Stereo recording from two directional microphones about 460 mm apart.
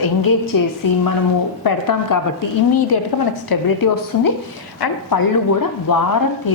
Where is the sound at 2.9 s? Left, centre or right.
Left.